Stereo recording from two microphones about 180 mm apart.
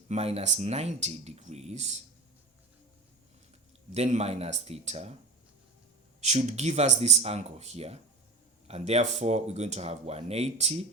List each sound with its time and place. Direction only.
0.1 s speech: 35° right (ahead or behind)
3.9 s speech: 35° right (ahead or behind)
6.1 s speech: 40° right (ahead or behind)